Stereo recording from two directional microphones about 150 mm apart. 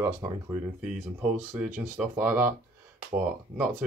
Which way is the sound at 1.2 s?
10° right (ahead or behind).